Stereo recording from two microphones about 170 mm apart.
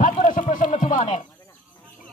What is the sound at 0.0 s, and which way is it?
Music, 50° left (ahead or behind).